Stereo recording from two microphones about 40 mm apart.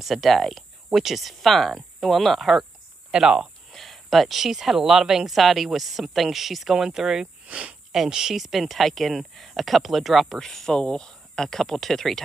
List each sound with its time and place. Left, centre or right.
0.0 s speech: centre
3.1 s speech: centre
3.7 s speech: centre
5.3 s speech: centre
7.4 s speech: right
8.1 s speech: centre
8.4 s speech: centre